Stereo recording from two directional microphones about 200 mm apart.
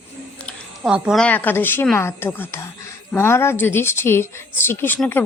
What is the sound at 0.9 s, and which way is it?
A woman's voice, 5° right (ahead or behind).